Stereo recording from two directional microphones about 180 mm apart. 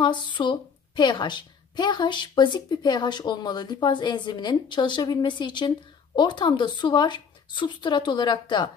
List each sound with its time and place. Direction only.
0.0 s a woman's voice: 25° left (ahead or behind)